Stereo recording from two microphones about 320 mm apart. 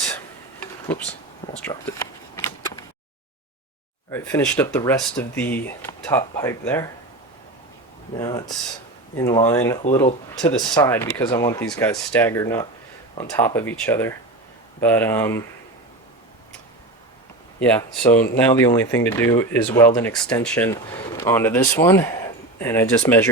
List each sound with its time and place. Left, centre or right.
0.6 s a sound: centre
1.5 s speech: centre
2.3 s a sound: centre
4.1 s speech: centre
8.2 s speech: centre
17.6 s speech: centre